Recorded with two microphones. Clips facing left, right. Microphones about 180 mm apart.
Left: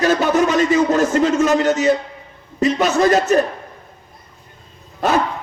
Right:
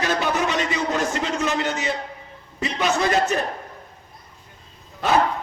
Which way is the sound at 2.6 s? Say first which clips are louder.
Left 7 dB; 45° left (ahead or behind).